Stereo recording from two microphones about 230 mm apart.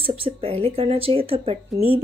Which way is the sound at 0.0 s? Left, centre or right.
Right.